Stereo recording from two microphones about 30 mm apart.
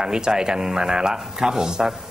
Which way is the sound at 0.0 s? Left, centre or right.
Right.